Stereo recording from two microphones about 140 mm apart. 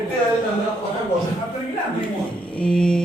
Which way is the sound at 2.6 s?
5° left (ahead or behind).